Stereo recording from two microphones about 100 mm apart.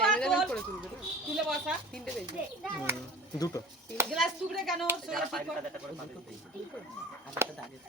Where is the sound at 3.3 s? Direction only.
35° left (ahead or behind).